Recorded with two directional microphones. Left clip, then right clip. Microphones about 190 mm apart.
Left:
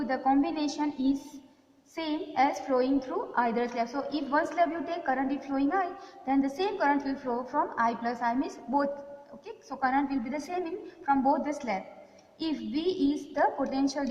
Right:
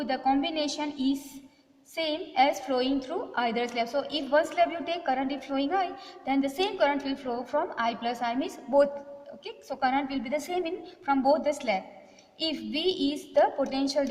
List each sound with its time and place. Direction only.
0.0 s a woman's voice: 50° right (ahead or behind)
2.0 s a woman's voice: 50° right (ahead or behind)